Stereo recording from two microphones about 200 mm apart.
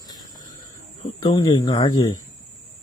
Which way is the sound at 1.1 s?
20° left (ahead or behind).